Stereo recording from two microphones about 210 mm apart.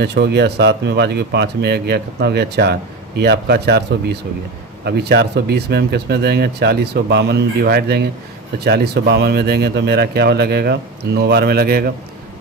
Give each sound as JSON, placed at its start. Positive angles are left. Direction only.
{"t": 0.0, "sound": "speech", "side_deg": -50}